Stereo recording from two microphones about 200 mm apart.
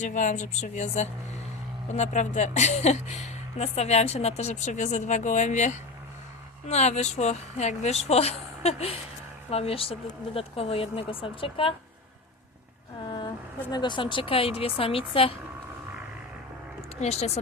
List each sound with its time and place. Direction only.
0.0 s speech: 40° left (ahead or behind)
13.0 s speech: 20° left (ahead or behind)
17.0 s speech: 30° left (ahead or behind)